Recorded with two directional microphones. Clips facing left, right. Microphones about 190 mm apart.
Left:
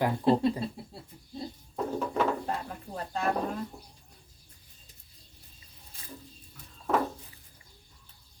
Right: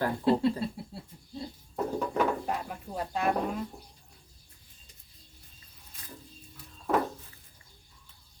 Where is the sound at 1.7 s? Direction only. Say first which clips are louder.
Right 1 dB; 5° right (ahead or behind).